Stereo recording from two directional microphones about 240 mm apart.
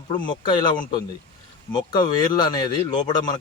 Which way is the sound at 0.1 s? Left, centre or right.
Centre.